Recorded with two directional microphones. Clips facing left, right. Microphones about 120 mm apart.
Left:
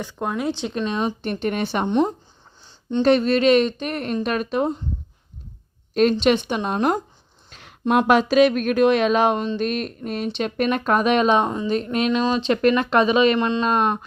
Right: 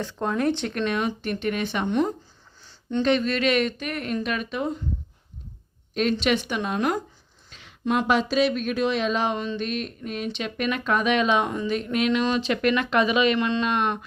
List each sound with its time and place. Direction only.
0.0 s speech: 10° left (ahead or behind)
0.9 s speech: 25° left (ahead or behind); by 4.7 s 40° left (ahead or behind)
5.9 s a woman's voice: 40° left (ahead or behind)
6.1 s speech: 30° left (ahead or behind)
7.5 s speech: 45° left (ahead or behind); by 12.5 s 25° left (ahead or behind)
12.6 s speech: 35° left (ahead or behind)